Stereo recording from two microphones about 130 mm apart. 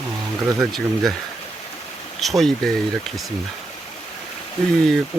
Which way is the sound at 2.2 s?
Centre (ahead or behind).